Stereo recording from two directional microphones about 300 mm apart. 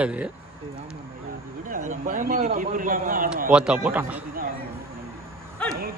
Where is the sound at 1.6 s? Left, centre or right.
Right.